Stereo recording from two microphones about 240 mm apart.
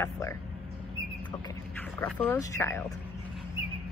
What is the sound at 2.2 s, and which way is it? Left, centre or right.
Speech, centre.